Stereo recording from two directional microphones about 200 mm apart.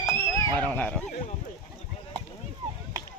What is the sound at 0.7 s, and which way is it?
Speech, 5° left (ahead or behind).